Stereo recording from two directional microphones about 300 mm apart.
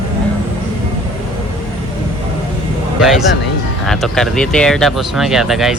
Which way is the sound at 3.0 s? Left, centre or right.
Centre.